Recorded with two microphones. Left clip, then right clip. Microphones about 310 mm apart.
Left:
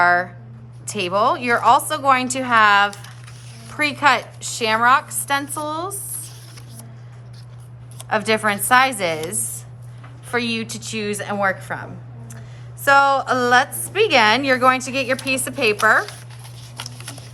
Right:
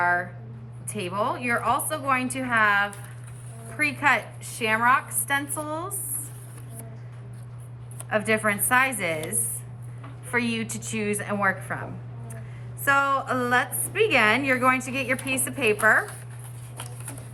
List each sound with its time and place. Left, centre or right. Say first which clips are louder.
0.0 s a woman's voice: left 8 dB; centre
4.0 s a woman's voice: left 7 dB; centre
8.1 s a woman's voice: left 5 dB; centre
10.3 s a woman's voice: left 4 dB; centre